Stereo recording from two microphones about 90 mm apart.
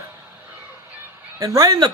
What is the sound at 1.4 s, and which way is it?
Speech, 40° right (ahead or behind).